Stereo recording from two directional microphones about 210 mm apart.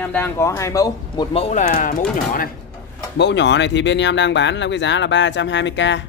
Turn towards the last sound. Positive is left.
turn(degrees=60)  # may be behind; listen again after turning